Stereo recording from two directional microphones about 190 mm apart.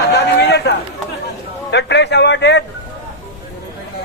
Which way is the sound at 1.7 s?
65° left (ahead or behind).